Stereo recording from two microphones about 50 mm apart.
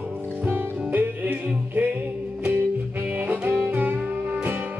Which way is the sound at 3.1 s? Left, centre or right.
Right.